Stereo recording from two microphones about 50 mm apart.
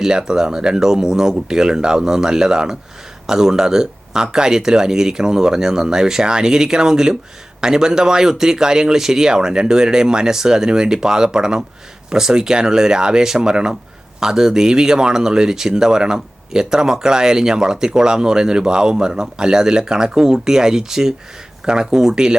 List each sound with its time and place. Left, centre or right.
0.0 s a man's voice: centre